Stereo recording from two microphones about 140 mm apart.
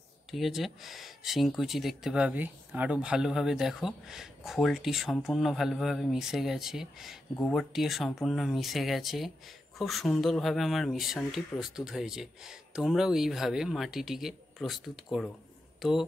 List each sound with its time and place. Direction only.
0.3 s speech: centre (ahead or behind)